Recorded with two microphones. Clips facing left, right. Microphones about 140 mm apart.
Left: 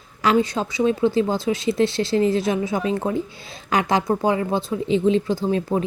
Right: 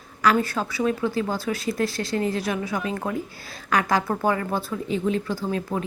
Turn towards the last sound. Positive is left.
turn(degrees=25)  # may be behind; listen again after turning